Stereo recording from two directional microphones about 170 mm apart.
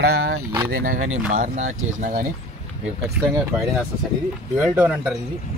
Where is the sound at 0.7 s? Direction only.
60° right (ahead or behind).